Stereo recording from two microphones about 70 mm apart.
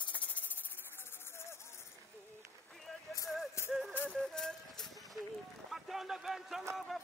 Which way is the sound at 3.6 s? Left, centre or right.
Left.